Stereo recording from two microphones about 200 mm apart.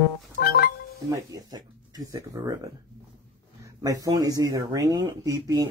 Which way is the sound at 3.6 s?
15° right (ahead or behind).